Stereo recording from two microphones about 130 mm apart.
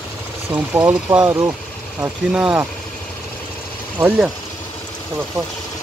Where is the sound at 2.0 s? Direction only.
10° right (ahead or behind).